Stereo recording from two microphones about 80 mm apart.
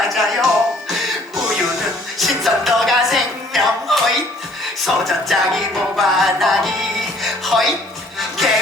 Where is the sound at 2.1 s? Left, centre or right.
Centre.